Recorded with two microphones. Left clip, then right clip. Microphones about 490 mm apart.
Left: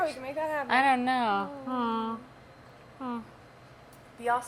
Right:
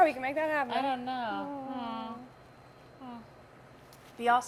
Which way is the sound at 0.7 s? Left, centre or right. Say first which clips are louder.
Left 8 dB; left.